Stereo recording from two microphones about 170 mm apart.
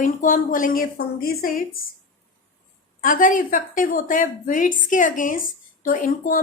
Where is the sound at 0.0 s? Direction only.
50° left (ahead or behind).